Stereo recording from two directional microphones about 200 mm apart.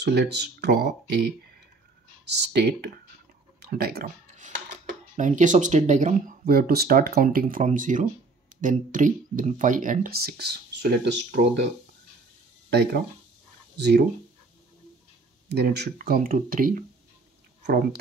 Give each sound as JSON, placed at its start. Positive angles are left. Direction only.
{"t": 0.0, "sound": "speech", "side_deg": -55}
{"t": 2.5, "sound": "speech", "side_deg": -55}
{"t": 4.4, "sound": "speech", "side_deg": -35}
{"t": 15.4, "sound": "speech", "side_deg": -55}